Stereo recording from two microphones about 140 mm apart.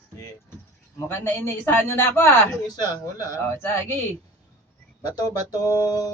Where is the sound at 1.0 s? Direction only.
15° left (ahead or behind).